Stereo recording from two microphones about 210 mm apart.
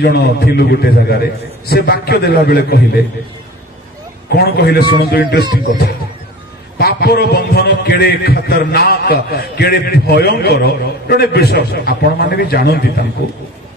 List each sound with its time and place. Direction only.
0.0 s a man's voice: 50° left (ahead or behind)
4.3 s a man's voice: 50° left (ahead or behind)
6.8 s a man's voice: 50° left (ahead or behind)